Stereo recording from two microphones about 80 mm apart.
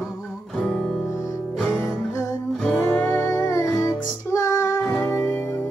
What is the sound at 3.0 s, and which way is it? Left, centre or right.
Music, left.